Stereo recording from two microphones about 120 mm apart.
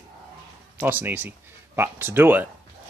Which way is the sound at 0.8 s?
15° right (ahead or behind).